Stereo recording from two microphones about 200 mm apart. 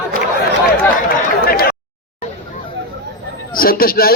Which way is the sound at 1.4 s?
50° left (ahead or behind).